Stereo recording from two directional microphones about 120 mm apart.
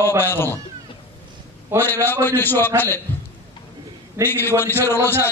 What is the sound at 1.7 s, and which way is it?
Speech, 15° left (ahead or behind).